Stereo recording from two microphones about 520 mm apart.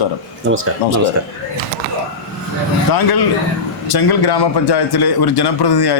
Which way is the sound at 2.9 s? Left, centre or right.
Left.